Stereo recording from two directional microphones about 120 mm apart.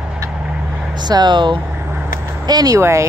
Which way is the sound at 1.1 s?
40° right (ahead or behind).